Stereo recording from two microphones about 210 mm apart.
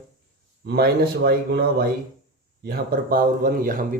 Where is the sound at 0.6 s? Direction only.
50° right (ahead or behind).